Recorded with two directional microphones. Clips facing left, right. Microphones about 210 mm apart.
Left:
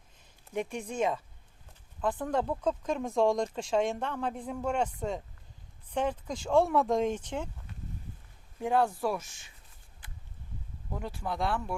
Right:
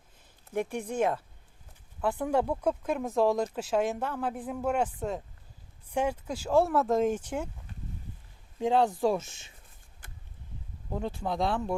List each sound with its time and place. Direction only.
0.8 s speech: 10° right (ahead or behind)
8.5 s speech: 15° right (ahead or behind)
11.0 s speech: 25° right (ahead or behind)